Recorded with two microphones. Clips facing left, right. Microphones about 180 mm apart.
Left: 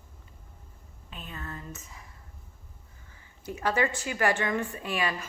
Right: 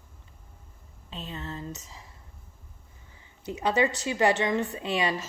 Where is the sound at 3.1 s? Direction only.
20° right (ahead or behind).